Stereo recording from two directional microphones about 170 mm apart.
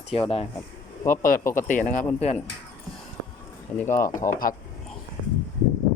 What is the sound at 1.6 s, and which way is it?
Speech, 50° left (ahead or behind).